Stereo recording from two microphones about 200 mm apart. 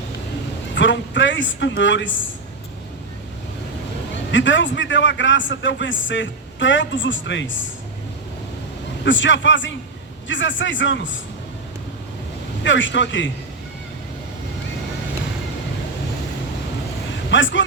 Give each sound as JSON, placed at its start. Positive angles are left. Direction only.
{"t": 0.8, "sound": "a man's voice", "side_deg": 65}
{"t": 4.3, "sound": "a man's voice", "side_deg": 70}
{"t": 9.0, "sound": "a man's voice", "side_deg": 70}
{"t": 12.6, "sound": "a man's voice", "side_deg": 65}
{"t": 17.3, "sound": "a man's voice", "side_deg": 70}